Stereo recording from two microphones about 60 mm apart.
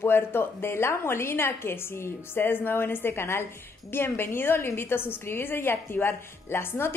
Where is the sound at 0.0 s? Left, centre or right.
Left.